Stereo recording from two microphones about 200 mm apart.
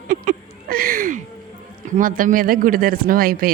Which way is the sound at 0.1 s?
45° right (ahead or behind).